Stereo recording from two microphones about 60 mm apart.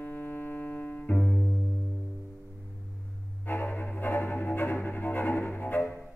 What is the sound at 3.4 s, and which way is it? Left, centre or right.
Music, left.